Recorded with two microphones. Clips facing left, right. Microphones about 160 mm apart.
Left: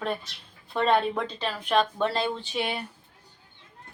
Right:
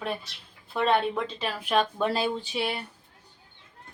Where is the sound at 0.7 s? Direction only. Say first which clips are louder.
Left 1 dB; centre (ahead or behind).